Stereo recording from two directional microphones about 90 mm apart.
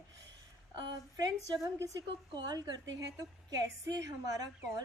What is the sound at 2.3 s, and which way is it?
A woman's voice, 50° right (ahead or behind).